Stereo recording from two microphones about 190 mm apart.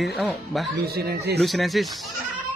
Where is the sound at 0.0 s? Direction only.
Centre (ahead or behind).